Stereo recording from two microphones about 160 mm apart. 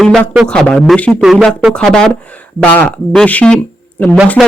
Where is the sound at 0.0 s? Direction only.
5° left (ahead or behind).